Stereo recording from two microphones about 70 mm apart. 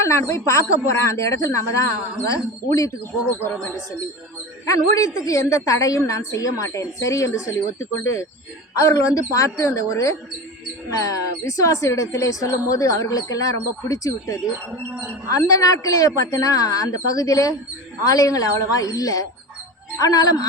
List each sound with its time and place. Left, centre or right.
0.0 s speech: left
4.6 s a woman's voice: left